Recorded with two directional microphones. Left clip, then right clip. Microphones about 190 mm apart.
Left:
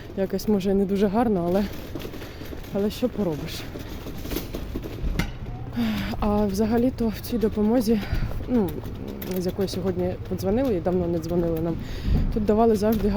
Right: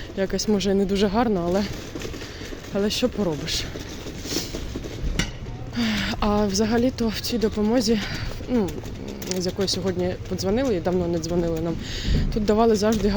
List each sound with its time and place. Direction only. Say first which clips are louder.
0.2 s a woman's voice: right 1 dB; 15° left (ahead or behind)
2.7 s a woman's voice: right 2 dB; 10° left (ahead or behind)
5.7 s a woman's voice: right 4 dB; 10° left (ahead or behind)